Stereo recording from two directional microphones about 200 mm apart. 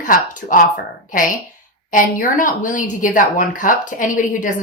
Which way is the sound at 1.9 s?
40° left (ahead or behind).